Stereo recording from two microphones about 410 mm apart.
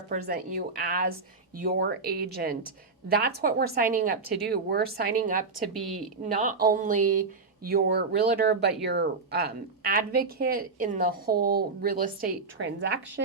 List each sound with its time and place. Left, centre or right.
0.1 s speech: right
5.7 s a woman's voice: centre
6.3 s speech: centre